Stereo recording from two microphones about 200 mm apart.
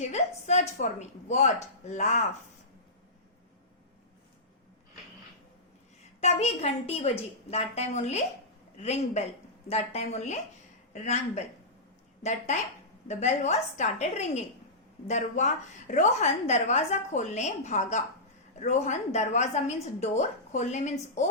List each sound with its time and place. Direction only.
0.0 s a woman's voice: 35° left (ahead or behind)
6.1 s a woman's voice: 35° left (ahead or behind)